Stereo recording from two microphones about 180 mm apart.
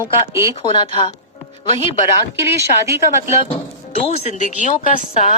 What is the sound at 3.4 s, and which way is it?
Speech, 30° left (ahead or behind).